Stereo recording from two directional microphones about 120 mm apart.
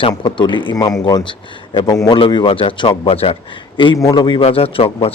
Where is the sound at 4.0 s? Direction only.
30° left (ahead or behind).